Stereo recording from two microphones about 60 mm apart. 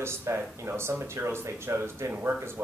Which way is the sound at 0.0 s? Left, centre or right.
Right.